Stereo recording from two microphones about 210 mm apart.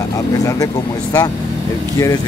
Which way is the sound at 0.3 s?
15° left (ahead or behind).